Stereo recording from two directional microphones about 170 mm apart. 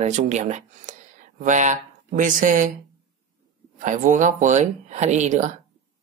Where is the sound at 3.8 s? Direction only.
45° right (ahead or behind).